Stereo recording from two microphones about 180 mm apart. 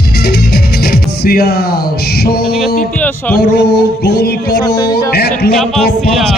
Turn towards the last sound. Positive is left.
turn(degrees=60)  # may be behind; listen again after turning